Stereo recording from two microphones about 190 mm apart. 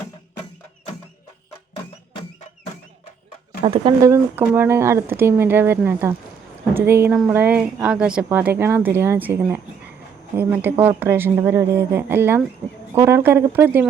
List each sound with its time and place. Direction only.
3.6 s speech: 30° right (ahead or behind)
4.0 s a woman's voice: 15° right (ahead or behind)